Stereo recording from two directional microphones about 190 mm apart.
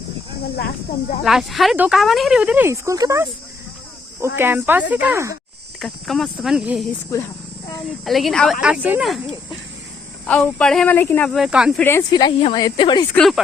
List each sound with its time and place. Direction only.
1.2 s speech: centre (ahead or behind); by 3.2 s 15° right (ahead or behind)
4.4 s speech: 10° right (ahead or behind)
5.8 s speech: centre (ahead or behind)
8.0 s speech: centre (ahead or behind)
10.2 s speech: 5° left (ahead or behind)
11.4 s speech: 5° right (ahead or behind)
11.8 s speech: 15° left (ahead or behind)
13.1 s speech: centre (ahead or behind)